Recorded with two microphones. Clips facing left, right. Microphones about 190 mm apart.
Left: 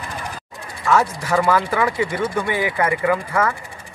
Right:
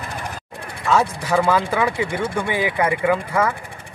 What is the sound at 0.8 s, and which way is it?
Speech, 15° right (ahead or behind).